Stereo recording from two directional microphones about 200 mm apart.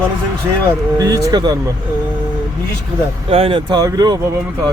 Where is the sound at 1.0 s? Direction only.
15° right (ahead or behind).